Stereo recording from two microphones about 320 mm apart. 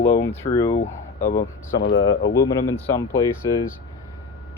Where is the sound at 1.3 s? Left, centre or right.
Left.